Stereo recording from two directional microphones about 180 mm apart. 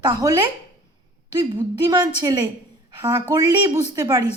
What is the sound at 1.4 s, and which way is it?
A woman's voice, 25° right (ahead or behind).